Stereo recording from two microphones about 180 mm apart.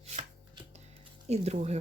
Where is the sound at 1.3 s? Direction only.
35° right (ahead or behind).